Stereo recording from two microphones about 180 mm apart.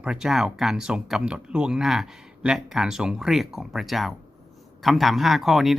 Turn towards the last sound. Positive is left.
turn(degrees=0)  # may be behind; listen again after turning